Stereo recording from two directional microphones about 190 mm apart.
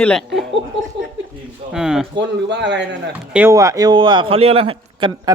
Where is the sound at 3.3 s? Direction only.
15° right (ahead or behind); by 5.1 s 30° right (ahead or behind).